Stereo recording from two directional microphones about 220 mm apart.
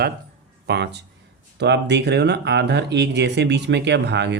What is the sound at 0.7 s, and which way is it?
Speech, 50° right (ahead or behind).